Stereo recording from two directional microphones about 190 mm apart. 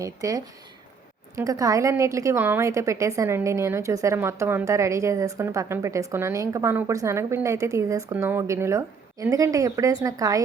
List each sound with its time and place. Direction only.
0.0 s a woman's voice: 20° right (ahead or behind)